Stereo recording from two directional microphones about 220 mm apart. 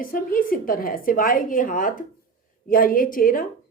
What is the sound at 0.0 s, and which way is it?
A woman's voice, 40° left (ahead or behind).